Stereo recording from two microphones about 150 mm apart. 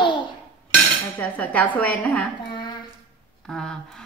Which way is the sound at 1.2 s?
10° left (ahead or behind).